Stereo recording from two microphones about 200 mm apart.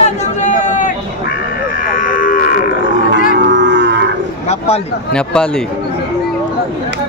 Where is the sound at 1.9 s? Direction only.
40° left (ahead or behind).